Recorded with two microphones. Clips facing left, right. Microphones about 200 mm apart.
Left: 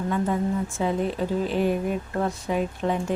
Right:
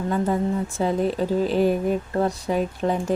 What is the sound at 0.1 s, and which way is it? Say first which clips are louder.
Speech: right 2 dB; 35° right (ahead or behind).